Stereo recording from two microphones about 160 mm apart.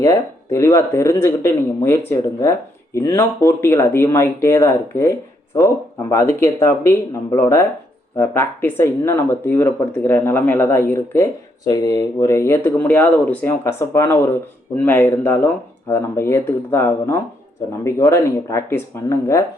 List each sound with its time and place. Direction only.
0.0 s speech: 20° left (ahead or behind)